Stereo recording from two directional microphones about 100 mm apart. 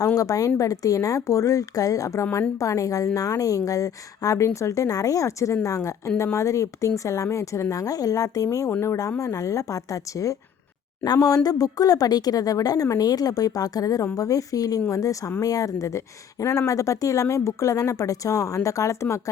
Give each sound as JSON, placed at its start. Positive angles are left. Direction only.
{"t": 0.2, "sound": "speech", "side_deg": 35}